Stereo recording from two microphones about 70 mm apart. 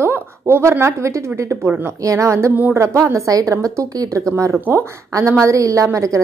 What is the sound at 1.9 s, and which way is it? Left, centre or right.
Speech, right.